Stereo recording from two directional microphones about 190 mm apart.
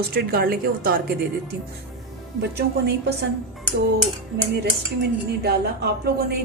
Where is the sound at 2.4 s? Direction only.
60° right (ahead or behind).